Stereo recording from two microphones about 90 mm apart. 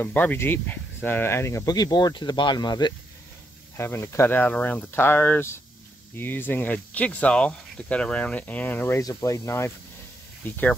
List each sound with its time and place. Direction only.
0.0 s speech: 20° left (ahead or behind)
1.7 s speech: 45° left (ahead or behind)
3.7 s speech: 30° left (ahead or behind)
9.0 s speech: 35° left (ahead or behind)
10.4 s speech: 20° left (ahead or behind)